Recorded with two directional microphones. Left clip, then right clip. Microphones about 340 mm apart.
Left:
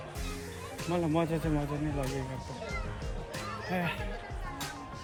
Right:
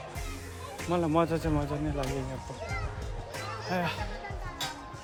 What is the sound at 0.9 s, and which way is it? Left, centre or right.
Speech, centre.